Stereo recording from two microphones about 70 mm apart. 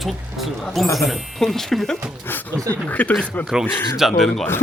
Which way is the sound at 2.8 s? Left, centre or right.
Centre.